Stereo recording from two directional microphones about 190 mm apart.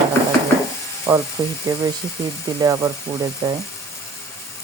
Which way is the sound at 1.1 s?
30° right (ahead or behind).